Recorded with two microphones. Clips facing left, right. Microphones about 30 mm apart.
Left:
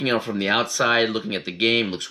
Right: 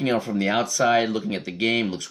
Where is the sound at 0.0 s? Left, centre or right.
Left.